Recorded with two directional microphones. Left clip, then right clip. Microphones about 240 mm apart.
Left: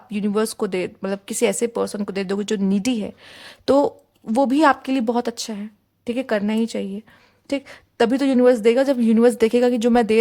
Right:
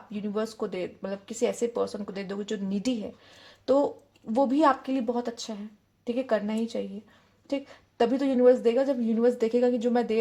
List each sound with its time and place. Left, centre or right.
0.1 s speech: left